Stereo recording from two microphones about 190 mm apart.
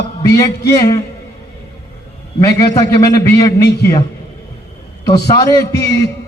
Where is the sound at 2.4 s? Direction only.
15° left (ahead or behind).